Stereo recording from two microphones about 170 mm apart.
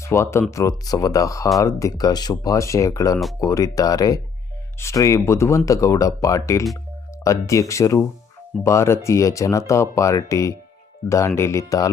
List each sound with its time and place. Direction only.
0.0 s speech: 15° left (ahead or behind)